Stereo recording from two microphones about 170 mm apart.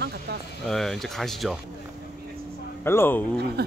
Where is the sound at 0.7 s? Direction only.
Centre (ahead or behind).